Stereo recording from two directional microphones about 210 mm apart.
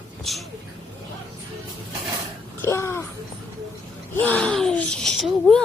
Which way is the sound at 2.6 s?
10° left (ahead or behind).